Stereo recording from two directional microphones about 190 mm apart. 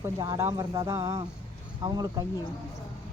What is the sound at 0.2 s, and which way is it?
A woman's voice, 15° right (ahead or behind).